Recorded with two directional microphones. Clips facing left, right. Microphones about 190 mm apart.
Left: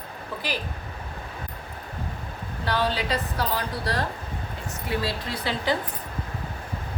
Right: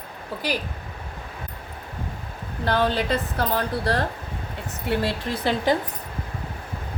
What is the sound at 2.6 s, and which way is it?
A woman's voice, 50° right (ahead or behind).